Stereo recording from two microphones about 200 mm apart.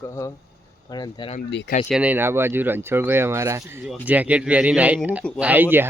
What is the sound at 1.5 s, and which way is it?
Speech, 60° left (ahead or behind).